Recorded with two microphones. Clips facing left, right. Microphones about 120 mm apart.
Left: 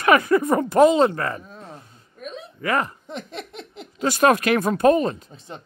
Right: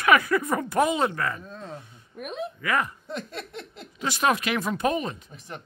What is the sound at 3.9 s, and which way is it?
Speech, 45° left (ahead or behind).